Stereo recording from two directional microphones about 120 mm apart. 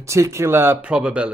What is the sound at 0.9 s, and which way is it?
Speech, 10° right (ahead or behind).